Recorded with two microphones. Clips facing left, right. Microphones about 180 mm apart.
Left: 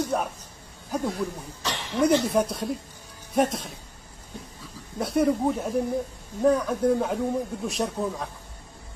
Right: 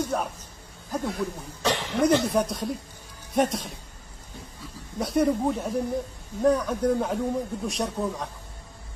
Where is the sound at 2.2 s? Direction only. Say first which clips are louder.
Left 1 dB; 5° left (ahead or behind).